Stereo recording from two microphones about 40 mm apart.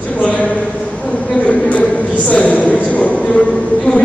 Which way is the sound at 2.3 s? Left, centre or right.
Left.